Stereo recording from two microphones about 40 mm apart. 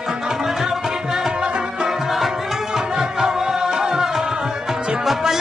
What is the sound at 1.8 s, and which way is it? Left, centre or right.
Music, centre.